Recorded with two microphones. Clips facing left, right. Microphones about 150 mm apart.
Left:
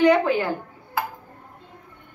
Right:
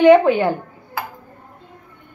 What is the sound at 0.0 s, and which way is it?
Speech, 25° right (ahead or behind).